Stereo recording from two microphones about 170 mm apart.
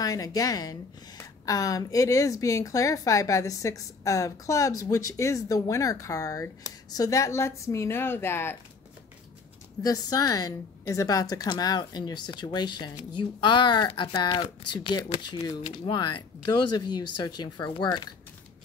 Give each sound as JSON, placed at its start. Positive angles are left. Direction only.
{"t": 0.0, "sound": "a woman's voice", "side_deg": 20}
{"t": 9.8, "sound": "a woman's voice", "side_deg": 20}